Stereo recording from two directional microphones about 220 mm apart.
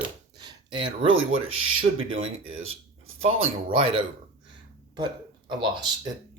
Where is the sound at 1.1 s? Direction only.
65° right (ahead or behind).